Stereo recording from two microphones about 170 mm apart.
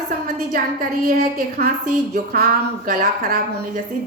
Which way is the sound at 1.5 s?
60° right (ahead or behind).